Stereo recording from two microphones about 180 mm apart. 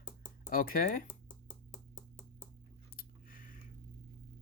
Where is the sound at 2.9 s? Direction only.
50° left (ahead or behind).